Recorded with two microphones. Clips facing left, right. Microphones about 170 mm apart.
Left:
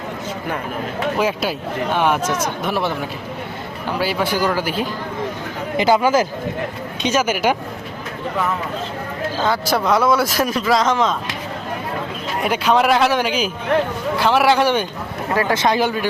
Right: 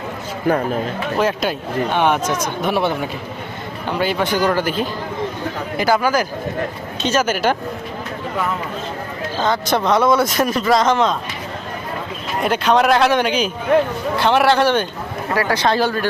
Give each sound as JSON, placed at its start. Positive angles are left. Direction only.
{"t": 1.2, "sound": "speech", "side_deg": 5}
{"t": 5.7, "sound": "speech", "side_deg": 20}
{"t": 7.0, "sound": "speech", "side_deg": 10}
{"t": 9.4, "sound": "speech", "side_deg": 5}
{"t": 12.4, "sound": "speech", "side_deg": 5}